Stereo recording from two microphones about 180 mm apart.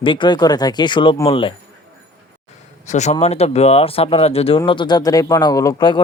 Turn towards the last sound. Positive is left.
turn(degrees=25)  # may be behind; listen again after turning